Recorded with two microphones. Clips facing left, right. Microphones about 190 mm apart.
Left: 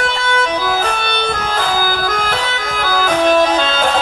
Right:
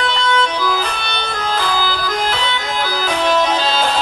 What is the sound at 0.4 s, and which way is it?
Music, 50° left (ahead or behind).